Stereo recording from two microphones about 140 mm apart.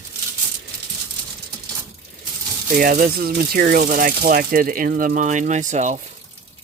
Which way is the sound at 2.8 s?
90° right.